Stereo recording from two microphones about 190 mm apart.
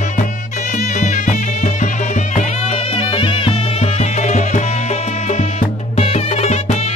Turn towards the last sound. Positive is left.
turn(degrees=35)  # may be behind; listen again after turning